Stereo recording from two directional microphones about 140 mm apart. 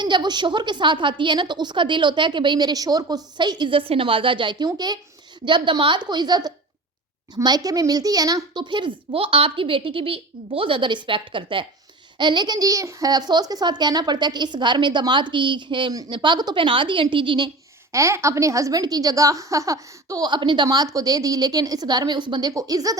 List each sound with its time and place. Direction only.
0.0 s a child's voice: 30° right (ahead or behind)
17.9 s a woman's voice: 20° right (ahead or behind)